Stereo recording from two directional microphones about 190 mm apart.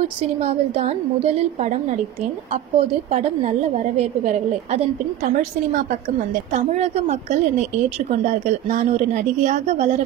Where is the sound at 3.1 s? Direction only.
35° right (ahead or behind).